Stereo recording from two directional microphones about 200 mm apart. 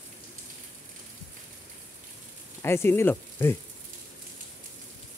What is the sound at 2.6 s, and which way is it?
Speech, 10° left (ahead or behind).